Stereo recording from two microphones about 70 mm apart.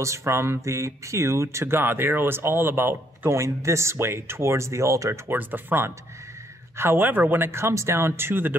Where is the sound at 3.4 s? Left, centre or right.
Right.